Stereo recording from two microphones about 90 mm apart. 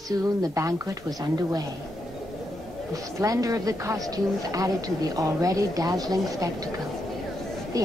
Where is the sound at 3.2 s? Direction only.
40° right (ahead or behind).